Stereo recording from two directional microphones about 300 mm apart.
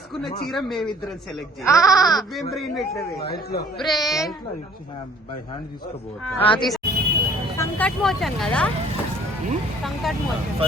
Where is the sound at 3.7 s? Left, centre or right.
Centre.